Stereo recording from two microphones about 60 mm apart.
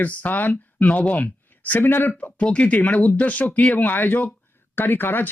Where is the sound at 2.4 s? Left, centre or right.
Left.